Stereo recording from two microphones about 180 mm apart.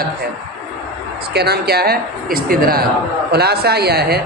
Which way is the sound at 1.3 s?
60° right (ahead or behind).